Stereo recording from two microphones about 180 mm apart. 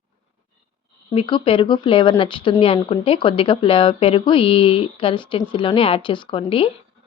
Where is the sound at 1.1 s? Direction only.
30° left (ahead or behind).